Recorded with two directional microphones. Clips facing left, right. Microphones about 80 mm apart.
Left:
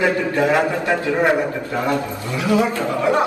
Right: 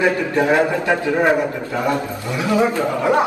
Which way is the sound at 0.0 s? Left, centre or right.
Right.